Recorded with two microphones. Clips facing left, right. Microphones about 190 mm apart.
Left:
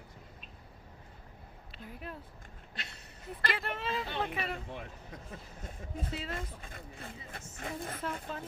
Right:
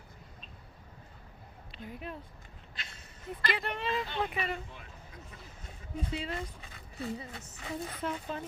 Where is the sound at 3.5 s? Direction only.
Centre (ahead or behind).